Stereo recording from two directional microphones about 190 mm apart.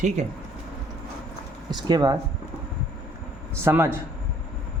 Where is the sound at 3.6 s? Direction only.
15° right (ahead or behind).